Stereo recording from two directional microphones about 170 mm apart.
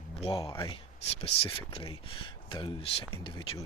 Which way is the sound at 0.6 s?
35° left (ahead or behind).